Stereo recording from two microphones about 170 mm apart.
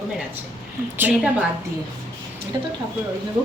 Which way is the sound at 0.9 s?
10° right (ahead or behind).